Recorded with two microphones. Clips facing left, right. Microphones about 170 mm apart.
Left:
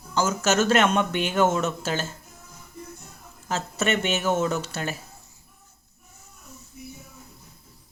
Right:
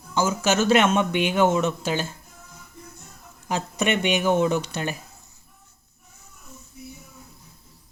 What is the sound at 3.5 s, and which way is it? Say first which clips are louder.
Speech: right 1 dB; 15° right (ahead or behind).